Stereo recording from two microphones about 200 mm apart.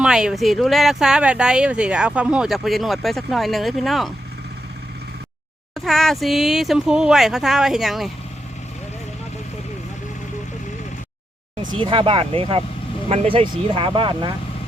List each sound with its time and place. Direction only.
0.0 s speech: 5° right (ahead or behind)
5.7 s speech: centre (ahead or behind)
11.8 s speech: 25° right (ahead or behind)